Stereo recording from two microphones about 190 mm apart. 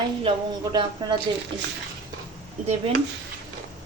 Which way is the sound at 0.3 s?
25° right (ahead or behind).